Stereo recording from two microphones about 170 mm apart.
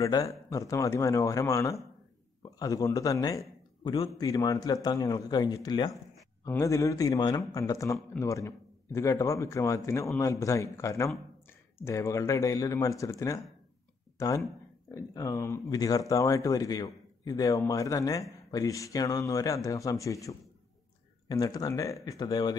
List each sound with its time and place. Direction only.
0.0 s a man's voice: 20° left (ahead or behind)